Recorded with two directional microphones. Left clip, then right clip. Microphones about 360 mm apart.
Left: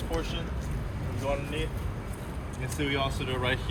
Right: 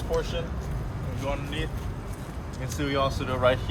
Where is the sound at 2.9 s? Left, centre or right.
Centre.